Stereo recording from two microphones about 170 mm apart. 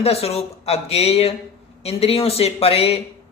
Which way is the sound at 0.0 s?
35° left (ahead or behind).